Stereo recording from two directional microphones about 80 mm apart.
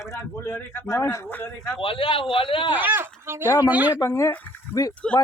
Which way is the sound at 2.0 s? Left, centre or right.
Left.